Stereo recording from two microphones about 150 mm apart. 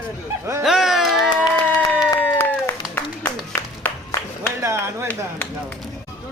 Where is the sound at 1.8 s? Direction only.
25° left (ahead or behind).